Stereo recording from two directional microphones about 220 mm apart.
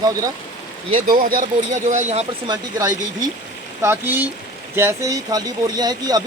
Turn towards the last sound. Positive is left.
turn(degrees=-15)  # may be behind; listen again after turning